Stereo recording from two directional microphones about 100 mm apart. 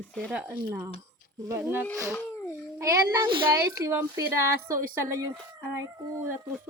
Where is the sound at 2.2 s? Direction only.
20° left (ahead or behind).